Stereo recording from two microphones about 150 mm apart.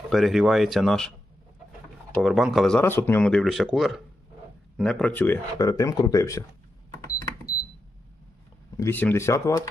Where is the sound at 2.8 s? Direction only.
15° left (ahead or behind).